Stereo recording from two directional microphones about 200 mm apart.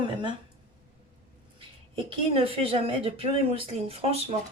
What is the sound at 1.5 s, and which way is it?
Speech, 25° right (ahead or behind).